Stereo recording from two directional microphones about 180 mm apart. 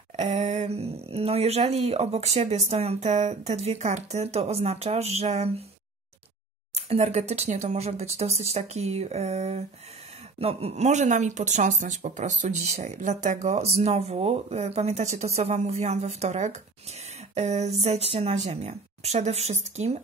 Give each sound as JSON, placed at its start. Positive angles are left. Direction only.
{"t": 0.1, "sound": "speech", "side_deg": -40}
{"t": 6.7, "sound": "speech", "side_deg": -35}